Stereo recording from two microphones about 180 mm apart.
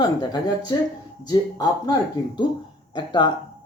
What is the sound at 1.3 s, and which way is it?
Speech, 20° left (ahead or behind).